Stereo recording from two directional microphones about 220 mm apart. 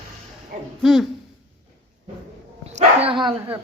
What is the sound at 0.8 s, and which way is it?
Speech, centre (ahead or behind).